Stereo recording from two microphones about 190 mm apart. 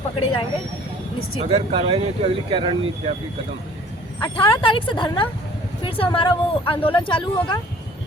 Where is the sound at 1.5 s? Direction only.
30° right (ahead or behind).